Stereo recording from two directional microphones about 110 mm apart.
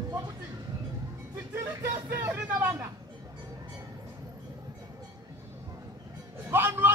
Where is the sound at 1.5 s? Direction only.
25° right (ahead or behind).